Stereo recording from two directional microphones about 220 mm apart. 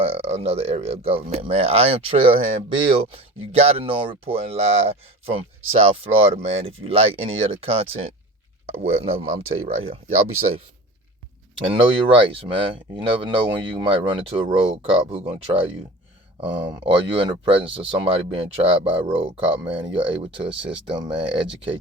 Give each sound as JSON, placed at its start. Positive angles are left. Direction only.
{"t": 0.0, "sound": "speech", "side_deg": -25}
{"t": 11.6, "sound": "speech", "side_deg": -25}